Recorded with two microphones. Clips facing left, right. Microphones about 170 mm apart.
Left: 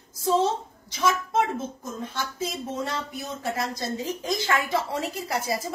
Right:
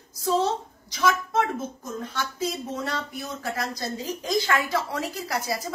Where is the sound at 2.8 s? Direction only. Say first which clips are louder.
Even; 25° left (ahead or behind).